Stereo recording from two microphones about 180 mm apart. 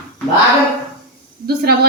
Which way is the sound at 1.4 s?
60° right (ahead or behind).